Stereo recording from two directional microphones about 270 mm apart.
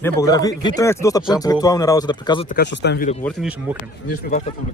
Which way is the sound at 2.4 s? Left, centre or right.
Left.